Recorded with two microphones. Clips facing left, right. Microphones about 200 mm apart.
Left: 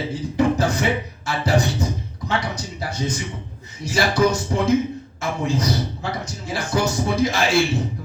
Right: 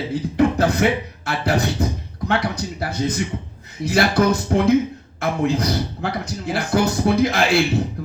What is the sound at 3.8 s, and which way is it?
Speech, 60° right (ahead or behind).